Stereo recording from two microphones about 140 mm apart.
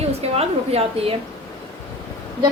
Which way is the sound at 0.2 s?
45° right (ahead or behind).